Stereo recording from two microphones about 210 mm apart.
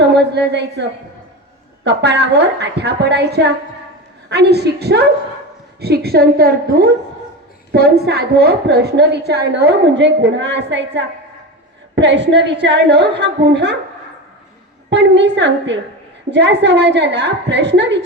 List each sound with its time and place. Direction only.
0.2 s a woman's voice: 55° right (ahead or behind)
14.8 s a woman's voice: 55° right (ahead or behind)